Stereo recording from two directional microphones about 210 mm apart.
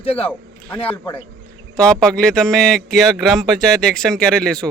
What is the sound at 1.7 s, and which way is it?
Speech, 5° left (ahead or behind).